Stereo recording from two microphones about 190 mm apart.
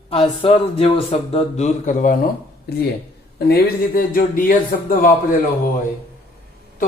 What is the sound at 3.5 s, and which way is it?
Speech, 50° left (ahead or behind).